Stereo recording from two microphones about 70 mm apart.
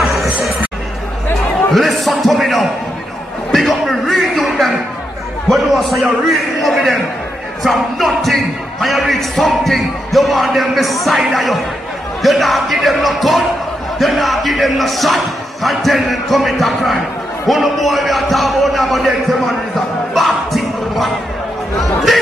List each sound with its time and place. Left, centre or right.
0.0 s a sound: centre
1.7 s speech: centre
3.5 s music: centre
5.5 s speech: centre